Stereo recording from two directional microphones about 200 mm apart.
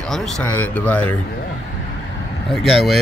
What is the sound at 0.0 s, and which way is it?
Speech, centre (ahead or behind).